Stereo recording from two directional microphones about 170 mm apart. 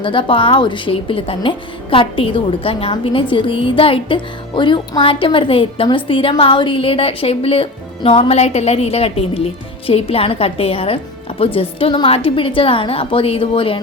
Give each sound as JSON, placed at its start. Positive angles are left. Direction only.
{"t": 0.0, "sound": "speech", "side_deg": 30}